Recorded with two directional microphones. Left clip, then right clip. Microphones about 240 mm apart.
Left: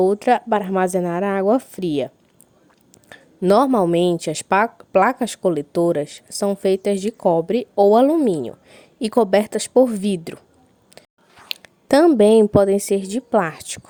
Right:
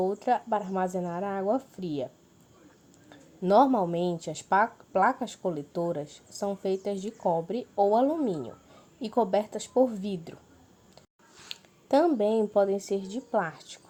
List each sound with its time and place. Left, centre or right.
0.0 s speech: left
3.1 s speech: left
11.4 s speech: left